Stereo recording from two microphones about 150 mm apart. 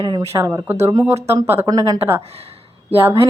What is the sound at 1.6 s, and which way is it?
Speech, 25° right (ahead or behind).